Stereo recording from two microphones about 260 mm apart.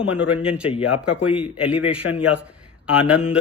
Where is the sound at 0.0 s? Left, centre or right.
Centre.